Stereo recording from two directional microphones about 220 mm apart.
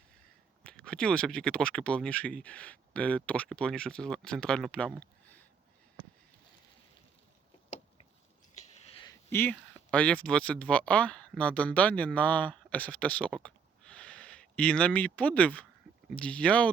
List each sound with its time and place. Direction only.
0.6 s speech: 5° left (ahead or behind)
9.0 s speech: 10° left (ahead or behind)